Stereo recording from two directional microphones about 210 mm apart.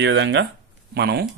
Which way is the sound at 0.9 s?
50° right (ahead or behind).